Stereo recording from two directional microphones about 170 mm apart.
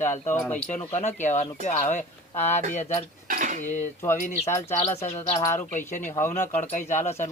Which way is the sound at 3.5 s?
45° left (ahead or behind).